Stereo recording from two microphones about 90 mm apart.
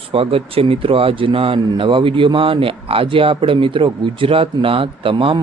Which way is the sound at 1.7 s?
70° right (ahead or behind).